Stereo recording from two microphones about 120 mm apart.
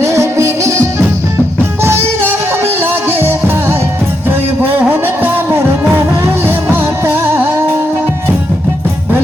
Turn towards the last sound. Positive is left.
turn(degrees=-20)  # may be behind; listen again after turning